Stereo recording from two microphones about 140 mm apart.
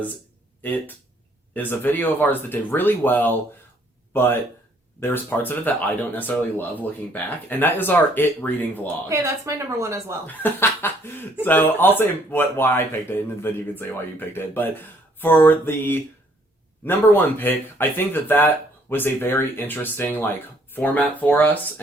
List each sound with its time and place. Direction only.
1.5 s speech: 10° left (ahead or behind)
9.0 s a woman's voice: 20° right (ahead or behind)
10.2 s speech: 15° left (ahead or behind)